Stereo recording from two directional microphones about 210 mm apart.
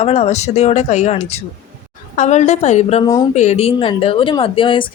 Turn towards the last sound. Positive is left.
turn(degrees=25)  # may be behind; listen again after turning